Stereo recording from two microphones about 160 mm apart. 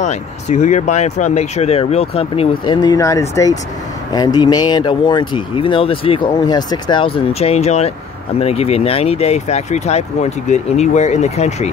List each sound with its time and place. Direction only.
0.0 s speech: 45° left (ahead or behind)